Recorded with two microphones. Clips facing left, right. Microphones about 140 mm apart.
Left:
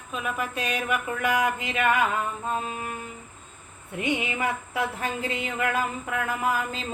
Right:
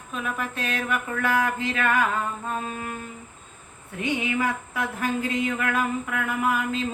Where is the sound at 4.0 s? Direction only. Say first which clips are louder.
Right 2 dB; 25° left (ahead or behind).